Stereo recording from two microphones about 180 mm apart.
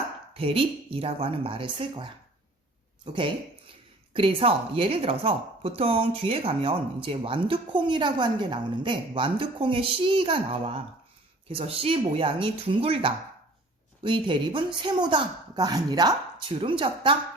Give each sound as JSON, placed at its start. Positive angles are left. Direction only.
{"t": 0.3, "sound": "a woman's voice", "side_deg": -30}